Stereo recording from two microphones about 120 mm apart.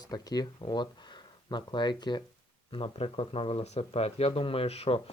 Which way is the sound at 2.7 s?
55° left (ahead or behind).